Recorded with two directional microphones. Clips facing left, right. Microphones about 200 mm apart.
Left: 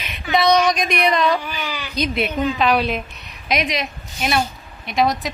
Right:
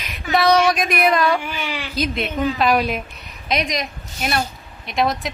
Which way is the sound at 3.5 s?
30° right (ahead or behind).